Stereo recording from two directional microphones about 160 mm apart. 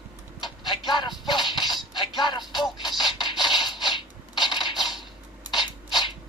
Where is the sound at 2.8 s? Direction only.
30° left (ahead or behind).